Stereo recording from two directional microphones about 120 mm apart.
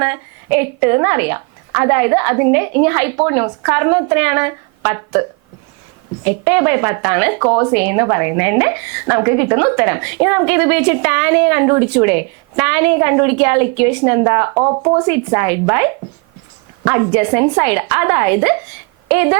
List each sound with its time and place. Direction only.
0.0 s a woman's voice: 20° right (ahead or behind)
6.2 s a woman's voice: 20° right (ahead or behind)
15.0 s a woman's voice: 20° right (ahead or behind)